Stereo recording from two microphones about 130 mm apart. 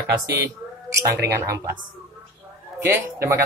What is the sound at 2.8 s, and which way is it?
Speech, 20° right (ahead or behind).